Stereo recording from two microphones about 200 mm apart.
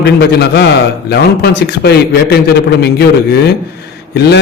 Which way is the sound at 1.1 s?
55° left (ahead or behind).